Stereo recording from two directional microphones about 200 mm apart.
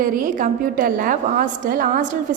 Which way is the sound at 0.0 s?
45° right (ahead or behind).